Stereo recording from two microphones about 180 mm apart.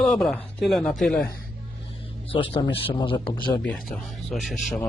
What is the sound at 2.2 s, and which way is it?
A man's voice, 30° left (ahead or behind).